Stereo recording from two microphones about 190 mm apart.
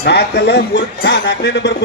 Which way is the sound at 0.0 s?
60° left (ahead or behind).